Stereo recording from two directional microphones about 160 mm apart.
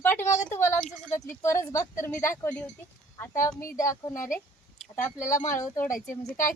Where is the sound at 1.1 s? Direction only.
15° left (ahead or behind).